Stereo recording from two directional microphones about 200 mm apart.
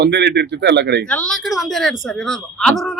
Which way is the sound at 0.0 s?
60° right (ahead or behind).